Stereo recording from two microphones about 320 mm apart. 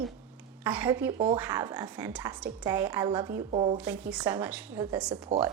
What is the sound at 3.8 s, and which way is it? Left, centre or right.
A woman's voice, centre.